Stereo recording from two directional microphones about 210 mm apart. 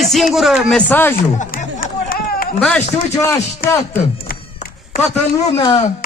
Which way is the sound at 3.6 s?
45° left (ahead or behind).